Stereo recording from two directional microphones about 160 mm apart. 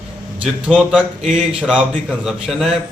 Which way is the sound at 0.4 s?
5° right (ahead or behind).